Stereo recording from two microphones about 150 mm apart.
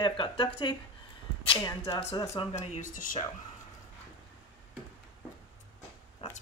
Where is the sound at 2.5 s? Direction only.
50° left (ahead or behind).